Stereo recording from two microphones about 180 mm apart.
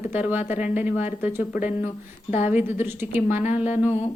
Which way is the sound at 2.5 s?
10° right (ahead or behind).